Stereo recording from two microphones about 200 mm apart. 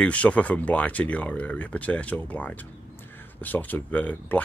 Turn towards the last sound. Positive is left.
turn(degrees=10)  # may be behind; listen again after turning